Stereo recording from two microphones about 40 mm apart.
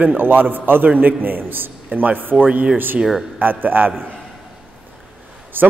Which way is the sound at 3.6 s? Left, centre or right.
Right.